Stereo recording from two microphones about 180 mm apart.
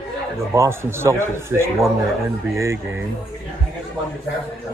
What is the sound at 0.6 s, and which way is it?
Speech, 15° right (ahead or behind).